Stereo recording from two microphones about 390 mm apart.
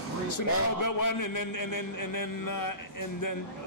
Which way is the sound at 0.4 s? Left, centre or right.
Left.